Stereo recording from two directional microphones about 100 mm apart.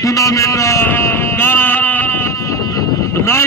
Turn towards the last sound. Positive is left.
turn(degrees=30)  # may be behind; listen again after turning